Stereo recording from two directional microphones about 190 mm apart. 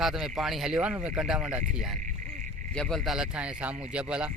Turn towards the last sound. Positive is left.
turn(degrees=-5)  # may be behind; listen again after turning